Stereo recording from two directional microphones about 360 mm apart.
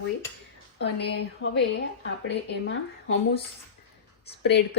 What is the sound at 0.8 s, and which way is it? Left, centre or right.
Speech, left.